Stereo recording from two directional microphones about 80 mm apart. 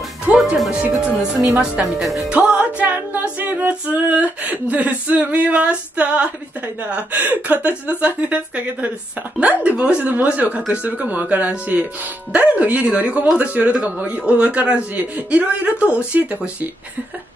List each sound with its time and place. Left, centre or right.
0.2 s music: centre
2.3 s music: centre